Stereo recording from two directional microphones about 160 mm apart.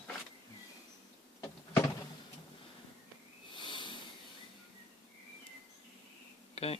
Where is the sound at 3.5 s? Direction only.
30° left (ahead or behind).